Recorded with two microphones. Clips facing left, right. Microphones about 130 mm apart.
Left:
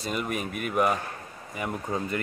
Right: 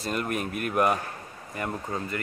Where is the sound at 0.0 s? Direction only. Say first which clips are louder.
Right 1 dB; 5° left (ahead or behind).